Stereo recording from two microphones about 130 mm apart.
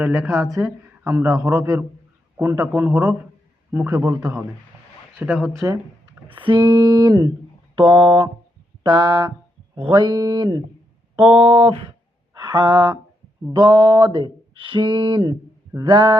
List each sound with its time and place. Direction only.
0.0 s speech: 20° right (ahead or behind)
5.2 s speech: 5° right (ahead or behind)
5.5 s speech: 20° right (ahead or behind)
6.3 s speech: 40° right (ahead or behind)
11.2 s speech: 45° right (ahead or behind)
12.3 s a sound: 35° right (ahead or behind)
13.5 s speech: 35° right (ahead or behind)